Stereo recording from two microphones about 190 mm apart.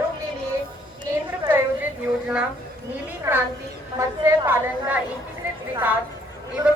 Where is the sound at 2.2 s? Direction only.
5° right (ahead or behind).